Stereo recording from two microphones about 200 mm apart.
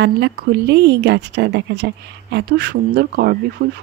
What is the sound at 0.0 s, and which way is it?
Speech, 60° right (ahead or behind).